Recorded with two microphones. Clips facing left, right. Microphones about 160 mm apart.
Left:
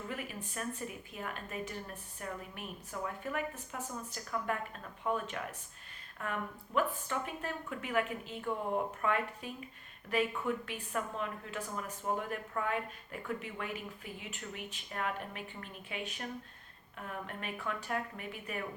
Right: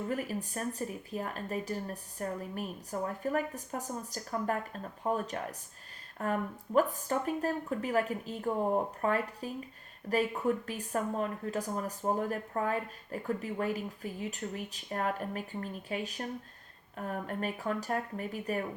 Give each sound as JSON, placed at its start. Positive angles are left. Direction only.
{"t": 0.1, "sound": "speech", "side_deg": -40}